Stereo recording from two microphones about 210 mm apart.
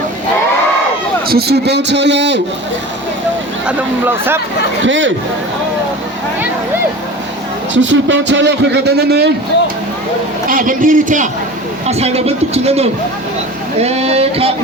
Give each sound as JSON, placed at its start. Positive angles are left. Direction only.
{"t": 1.3, "sound": "a man's voice", "side_deg": -50}
{"t": 3.7, "sound": "speech", "side_deg": -10}
{"t": 4.8, "sound": "a man's voice", "side_deg": -65}
{"t": 7.7, "sound": "a man's voice", "side_deg": -60}
{"t": 10.5, "sound": "a man's voice", "side_deg": -40}